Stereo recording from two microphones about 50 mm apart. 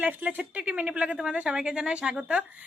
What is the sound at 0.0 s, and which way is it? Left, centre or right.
A woman's voice, right.